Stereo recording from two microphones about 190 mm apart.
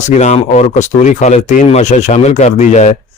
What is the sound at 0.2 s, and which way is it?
Speech, 35° left (ahead or behind).